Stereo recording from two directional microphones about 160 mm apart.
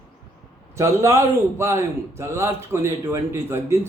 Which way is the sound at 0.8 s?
20° right (ahead or behind).